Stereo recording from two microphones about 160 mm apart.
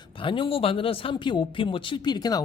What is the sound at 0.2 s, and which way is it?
Speech, 30° left (ahead or behind).